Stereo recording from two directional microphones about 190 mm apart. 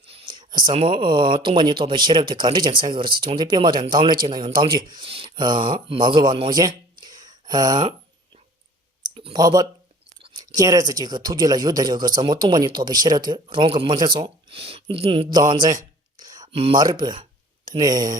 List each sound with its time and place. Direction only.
0.0 s speech: 30° right (ahead or behind)
9.1 s speech: 25° right (ahead or behind)
16.2 s a sound: 20° right (ahead or behind)
16.8 s speech: 20° right (ahead or behind)